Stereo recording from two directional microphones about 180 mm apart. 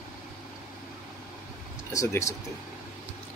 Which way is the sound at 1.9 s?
15° left (ahead or behind).